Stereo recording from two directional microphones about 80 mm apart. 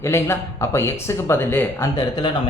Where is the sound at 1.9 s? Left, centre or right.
Left.